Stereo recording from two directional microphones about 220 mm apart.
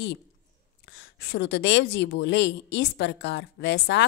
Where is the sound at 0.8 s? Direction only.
50° left (ahead or behind).